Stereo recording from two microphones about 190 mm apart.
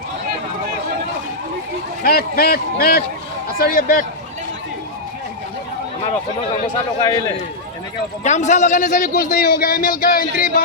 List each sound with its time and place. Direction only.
2.0 s a man's voice: 50° left (ahead or behind)
8.2 s a man's voice: 40° left (ahead or behind)